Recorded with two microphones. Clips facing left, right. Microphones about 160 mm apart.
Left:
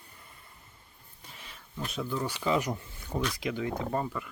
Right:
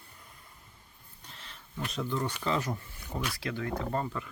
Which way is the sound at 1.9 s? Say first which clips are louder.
Even; 5° left (ahead or behind).